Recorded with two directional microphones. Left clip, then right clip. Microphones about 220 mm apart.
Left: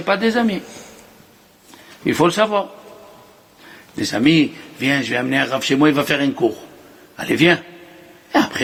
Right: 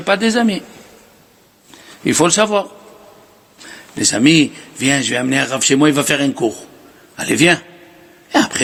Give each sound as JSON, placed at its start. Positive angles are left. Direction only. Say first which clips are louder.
{"t": 0.0, "sound": "a man's voice", "louder": "right 2 dB", "side_deg": -45}
{"t": 2.0, "sound": "a man's voice", "louder": "right 2 dB", "side_deg": -45}